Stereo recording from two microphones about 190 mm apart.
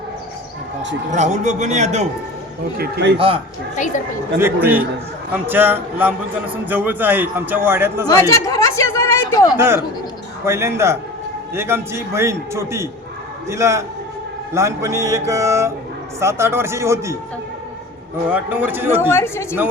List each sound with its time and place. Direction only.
1.1 s a man's voice: 40° right (ahead or behind)
2.7 s speech: 55° right (ahead or behind)
3.2 s speech: 30° right (ahead or behind)
4.4 s a man's voice: 10° right (ahead or behind)
8.0 s speech: 20° left (ahead or behind)
9.6 s a man's voice: 15° right (ahead or behind)
18.3 s a man's voice: 10° right (ahead or behind)
19.1 s a woman's voice: 15° left (ahead or behind)